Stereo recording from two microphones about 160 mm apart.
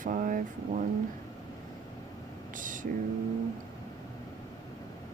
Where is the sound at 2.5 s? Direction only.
55° right (ahead or behind).